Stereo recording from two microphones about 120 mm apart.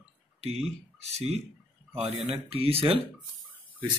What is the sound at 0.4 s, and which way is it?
Speech, 60° right (ahead or behind).